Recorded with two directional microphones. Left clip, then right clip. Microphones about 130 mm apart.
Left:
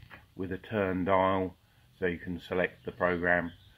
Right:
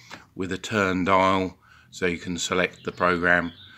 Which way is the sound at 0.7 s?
40° right (ahead or behind).